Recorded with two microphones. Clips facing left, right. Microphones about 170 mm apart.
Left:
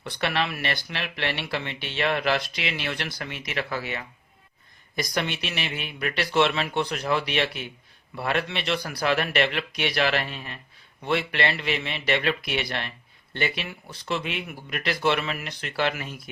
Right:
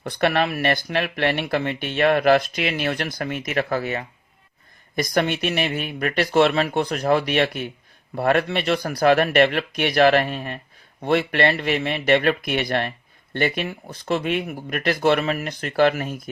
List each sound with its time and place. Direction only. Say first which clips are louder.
0.0 s speech: right 6 dB; 50° right (ahead or behind)